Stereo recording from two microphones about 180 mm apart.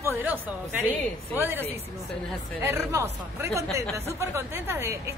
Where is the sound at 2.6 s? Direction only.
15° right (ahead or behind).